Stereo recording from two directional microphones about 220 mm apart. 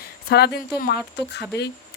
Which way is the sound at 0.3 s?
45° left (ahead or behind).